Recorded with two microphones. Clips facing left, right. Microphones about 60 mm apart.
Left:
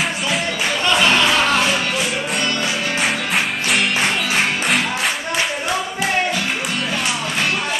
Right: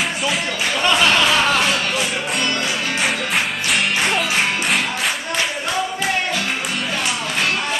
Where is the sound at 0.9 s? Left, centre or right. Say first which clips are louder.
Left 1 dB; centre.